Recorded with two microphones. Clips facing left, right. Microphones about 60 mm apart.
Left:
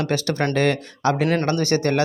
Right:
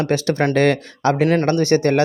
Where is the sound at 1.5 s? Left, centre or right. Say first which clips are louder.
Right 4 dB; right.